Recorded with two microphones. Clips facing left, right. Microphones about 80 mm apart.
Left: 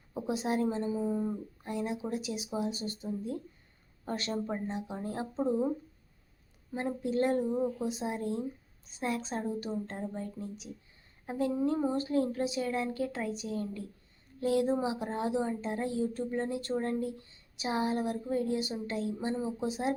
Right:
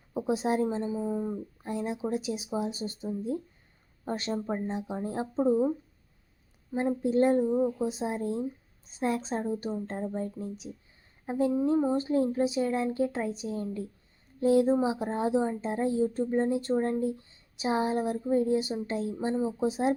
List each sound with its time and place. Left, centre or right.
0.1 s a sound: centre
0.3 s a woman's voice: right; by 1.4 s centre
1.6 s speech: right
4.0 s a woman's voice: right
6.7 s speech: right
7.9 s a woman's voice: right
19.3 s speech: centre